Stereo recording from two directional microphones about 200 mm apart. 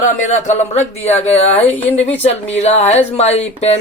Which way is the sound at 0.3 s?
35° left (ahead or behind).